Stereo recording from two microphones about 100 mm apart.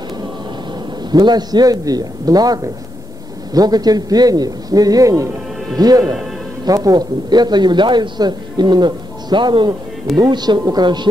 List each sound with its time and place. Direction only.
1.1 s a man's voice: 45° right (ahead or behind)